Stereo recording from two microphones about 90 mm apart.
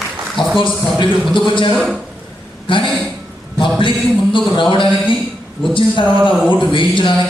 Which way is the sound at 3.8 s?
65° left (ahead or behind).